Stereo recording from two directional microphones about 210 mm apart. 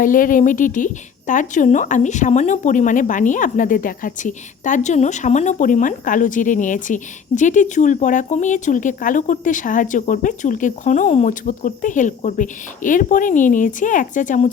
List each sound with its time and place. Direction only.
0.0 s speech: 40° left (ahead or behind)